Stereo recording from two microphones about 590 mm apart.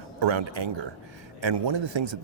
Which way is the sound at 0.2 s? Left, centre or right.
Right.